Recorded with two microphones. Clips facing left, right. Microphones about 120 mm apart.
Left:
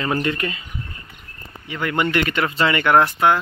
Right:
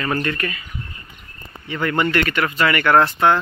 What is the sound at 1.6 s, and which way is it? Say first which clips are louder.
Speech: right 2 dB; 10° left (ahead or behind).